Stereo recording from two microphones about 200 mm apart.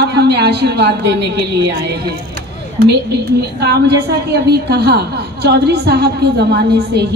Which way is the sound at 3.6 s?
55° right (ahead or behind).